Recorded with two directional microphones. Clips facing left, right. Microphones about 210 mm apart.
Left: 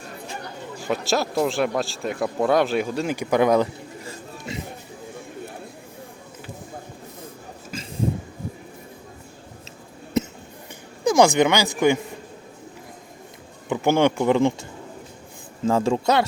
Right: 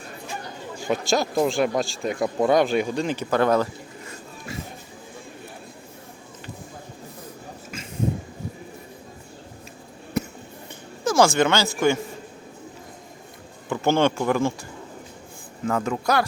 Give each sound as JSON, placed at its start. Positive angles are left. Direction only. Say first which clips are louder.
{"t": 0.9, "sound": "speech", "louder": "right 1 dB", "side_deg": 0}
{"t": 4.0, "sound": "a sound", "louder": "left 3 dB", "side_deg": 20}
{"t": 10.2, "sound": "a sound", "louder": "left 3 dB", "side_deg": 20}
{"t": 11.0, "sound": "speech", "louder": "left 2 dB", "side_deg": 15}
{"t": 13.7, "sound": "speech", "louder": "left 1 dB", "side_deg": 15}
{"t": 15.6, "sound": "speech", "louder": "left 4 dB", "side_deg": 30}